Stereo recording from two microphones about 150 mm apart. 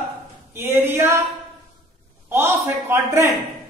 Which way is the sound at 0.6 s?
15° right (ahead or behind).